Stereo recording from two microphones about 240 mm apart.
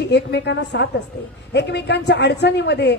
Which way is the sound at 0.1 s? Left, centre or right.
Left.